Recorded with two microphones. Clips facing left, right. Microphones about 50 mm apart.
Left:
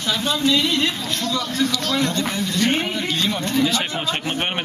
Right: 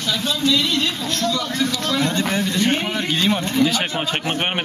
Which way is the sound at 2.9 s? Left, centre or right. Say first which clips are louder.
Right 3 dB; right.